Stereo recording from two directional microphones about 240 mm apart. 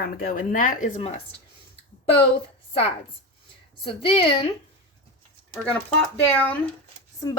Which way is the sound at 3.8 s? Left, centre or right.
Left.